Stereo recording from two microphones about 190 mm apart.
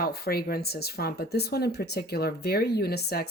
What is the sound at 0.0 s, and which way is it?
Speech, 55° left (ahead or behind).